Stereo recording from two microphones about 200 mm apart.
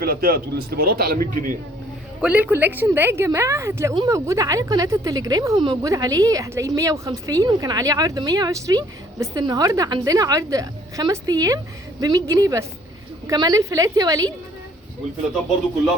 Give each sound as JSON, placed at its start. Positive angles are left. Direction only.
{"t": 0.0, "sound": "speech", "side_deg": -50}
{"t": 2.2, "sound": "a woman's voice", "side_deg": -10}